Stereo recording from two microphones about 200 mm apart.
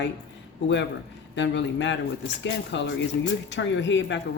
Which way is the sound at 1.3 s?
60° left (ahead or behind).